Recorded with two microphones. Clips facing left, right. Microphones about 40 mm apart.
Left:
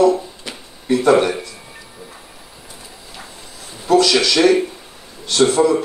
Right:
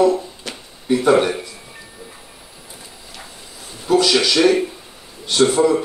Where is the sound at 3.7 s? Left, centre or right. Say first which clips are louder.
Left 2 dB; centre.